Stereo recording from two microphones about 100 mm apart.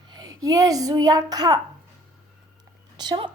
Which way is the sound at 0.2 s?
40° right (ahead or behind).